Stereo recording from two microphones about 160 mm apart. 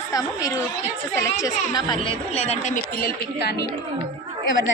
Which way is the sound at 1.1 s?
20° left (ahead or behind).